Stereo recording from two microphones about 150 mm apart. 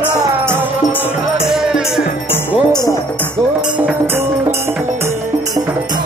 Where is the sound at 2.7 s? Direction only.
25° left (ahead or behind).